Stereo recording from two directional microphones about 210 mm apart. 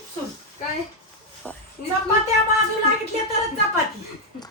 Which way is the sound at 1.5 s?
10° left (ahead or behind).